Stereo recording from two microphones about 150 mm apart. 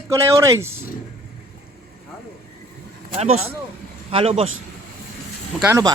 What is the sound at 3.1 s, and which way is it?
A man's voice, 45° right (ahead or behind).